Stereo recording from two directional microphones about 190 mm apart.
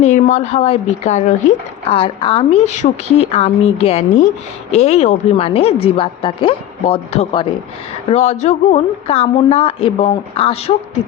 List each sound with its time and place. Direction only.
0.0 s a woman's voice: 40° left (ahead or behind)